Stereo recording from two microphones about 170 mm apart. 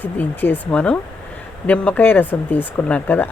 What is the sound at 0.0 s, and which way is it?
Speech, 10° left (ahead or behind).